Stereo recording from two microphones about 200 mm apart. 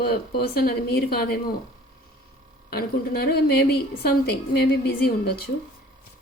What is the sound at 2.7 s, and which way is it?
A woman's voice, 50° left (ahead or behind).